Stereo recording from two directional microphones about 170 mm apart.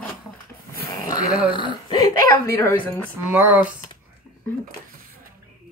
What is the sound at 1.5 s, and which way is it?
Speech, 25° left (ahead or behind).